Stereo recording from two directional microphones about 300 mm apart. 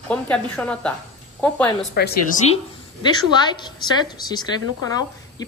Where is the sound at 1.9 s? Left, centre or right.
Left.